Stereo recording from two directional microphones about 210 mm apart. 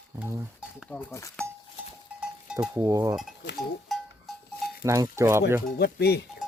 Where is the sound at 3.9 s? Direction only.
Centre (ahead or behind).